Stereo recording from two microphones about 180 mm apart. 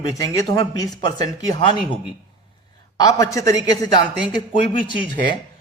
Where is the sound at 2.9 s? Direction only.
20° left (ahead or behind).